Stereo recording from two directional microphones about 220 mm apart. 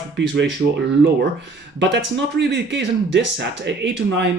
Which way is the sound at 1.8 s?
55° right (ahead or behind).